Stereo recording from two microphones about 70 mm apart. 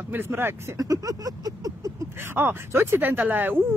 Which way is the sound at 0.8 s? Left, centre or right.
Right.